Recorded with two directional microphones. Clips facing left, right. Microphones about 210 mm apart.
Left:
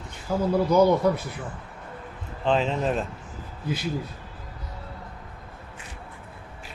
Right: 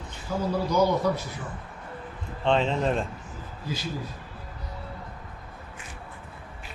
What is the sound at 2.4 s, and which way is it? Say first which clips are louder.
Speech: even; 5° left (ahead or behind).